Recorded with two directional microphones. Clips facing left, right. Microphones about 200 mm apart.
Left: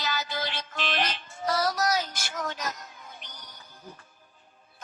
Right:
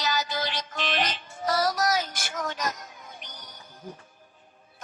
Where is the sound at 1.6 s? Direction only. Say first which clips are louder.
Right 1 dB; 50° right (ahead or behind).